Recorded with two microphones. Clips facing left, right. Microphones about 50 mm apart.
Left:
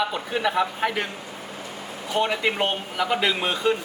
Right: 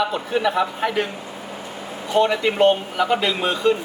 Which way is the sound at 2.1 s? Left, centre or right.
Centre.